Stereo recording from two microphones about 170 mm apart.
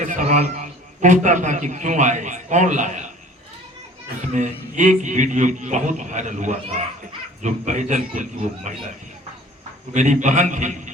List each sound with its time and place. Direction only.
0.0 s a man's voice: 50° right (ahead or behind)
4.3 s a man's voice: 45° right (ahead or behind)
9.9 s a man's voice: 45° right (ahead or behind)